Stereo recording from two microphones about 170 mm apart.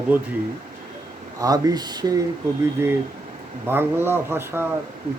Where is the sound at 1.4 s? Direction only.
20° right (ahead or behind).